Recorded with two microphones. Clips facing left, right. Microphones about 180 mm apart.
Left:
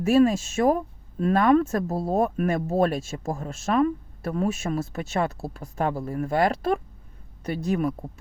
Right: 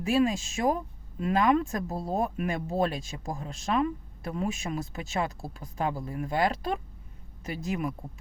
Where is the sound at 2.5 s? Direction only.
40° left (ahead or behind).